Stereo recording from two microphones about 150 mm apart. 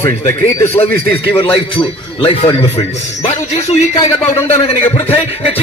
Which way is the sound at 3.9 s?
20° left (ahead or behind).